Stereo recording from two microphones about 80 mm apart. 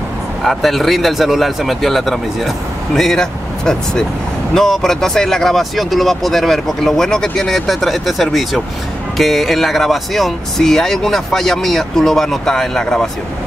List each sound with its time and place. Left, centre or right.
0.5 s speech: centre